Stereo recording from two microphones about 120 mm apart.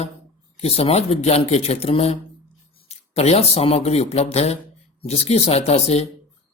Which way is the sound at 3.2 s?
60° left (ahead or behind).